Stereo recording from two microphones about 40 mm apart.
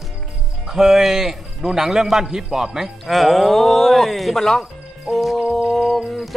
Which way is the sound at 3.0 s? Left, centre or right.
Centre.